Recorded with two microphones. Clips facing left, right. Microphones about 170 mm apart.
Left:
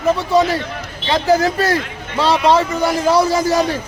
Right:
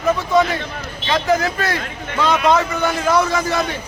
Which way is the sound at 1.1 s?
35° left (ahead or behind).